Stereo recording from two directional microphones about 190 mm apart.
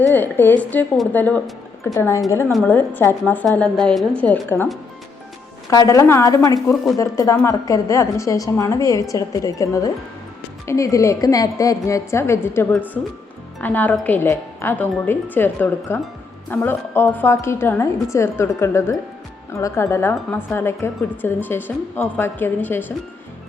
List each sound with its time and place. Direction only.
0.1 s speech: 10° left (ahead or behind)
5.7 s speech: 20° left (ahead or behind)
12.7 s a woman's voice: 10° right (ahead or behind)
13.6 s speech: 10° left (ahead or behind)